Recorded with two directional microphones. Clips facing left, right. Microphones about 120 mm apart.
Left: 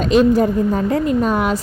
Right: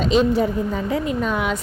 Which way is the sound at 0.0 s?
55° left (ahead or behind).